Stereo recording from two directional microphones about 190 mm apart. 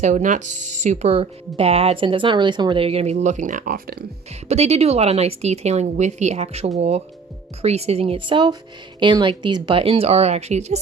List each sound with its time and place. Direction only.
0.0 s speech: 40° right (ahead or behind)